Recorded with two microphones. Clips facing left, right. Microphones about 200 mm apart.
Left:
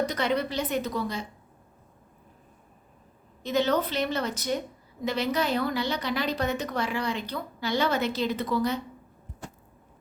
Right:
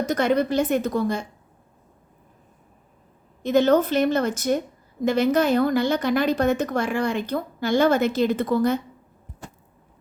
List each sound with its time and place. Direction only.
0.0 s a woman's voice: 50° right (ahead or behind)
3.4 s a woman's voice: 50° right (ahead or behind)